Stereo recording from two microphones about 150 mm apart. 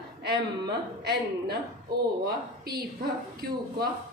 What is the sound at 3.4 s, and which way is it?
Speech, 90° right.